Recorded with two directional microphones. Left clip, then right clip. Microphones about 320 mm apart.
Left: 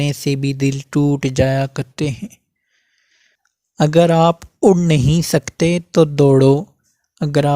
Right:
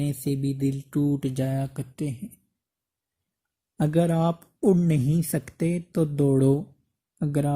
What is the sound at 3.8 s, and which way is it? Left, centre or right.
Speech, left.